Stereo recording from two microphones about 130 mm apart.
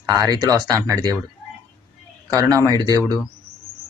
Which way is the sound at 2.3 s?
25° right (ahead or behind).